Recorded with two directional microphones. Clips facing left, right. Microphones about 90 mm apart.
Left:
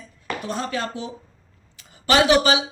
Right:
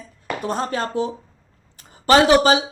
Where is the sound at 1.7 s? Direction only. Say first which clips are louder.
Right 4 dB; 40° right (ahead or behind).